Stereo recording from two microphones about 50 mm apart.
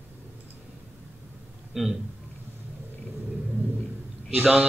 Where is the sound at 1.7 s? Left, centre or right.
Centre.